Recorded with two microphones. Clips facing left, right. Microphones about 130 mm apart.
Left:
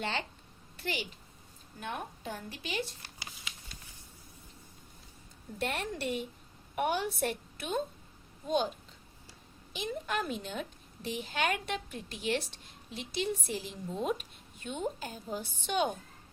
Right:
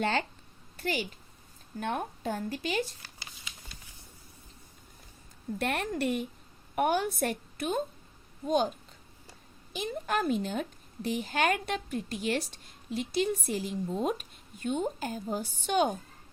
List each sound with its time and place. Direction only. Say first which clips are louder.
0.0 s a woman's voice: right 6 dB; 50° right (ahead or behind)
5.5 s a woman's voice: right 4 dB; 55° right (ahead or behind)
9.7 s a woman's voice: right 3 dB; 45° right (ahead or behind)